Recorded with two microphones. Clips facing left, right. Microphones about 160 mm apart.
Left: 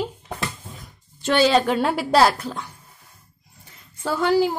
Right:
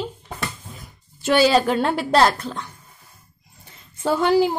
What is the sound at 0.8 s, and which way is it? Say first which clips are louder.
A woman's voice: right 1 dB; 5° right (ahead or behind).